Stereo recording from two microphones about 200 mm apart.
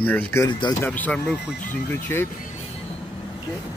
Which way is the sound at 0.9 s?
5° left (ahead or behind).